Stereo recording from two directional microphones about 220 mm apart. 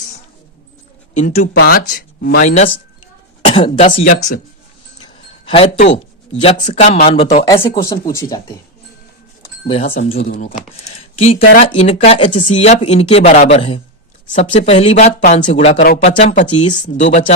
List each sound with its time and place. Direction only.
1.2 s speech: 30° left (ahead or behind)
5.0 s a sound: 25° left (ahead or behind)
6.4 s speech: 30° left (ahead or behind)
7.4 s speech: 15° left (ahead or behind)
9.6 s speech: 25° left (ahead or behind)
10.1 s speech: 35° left (ahead or behind)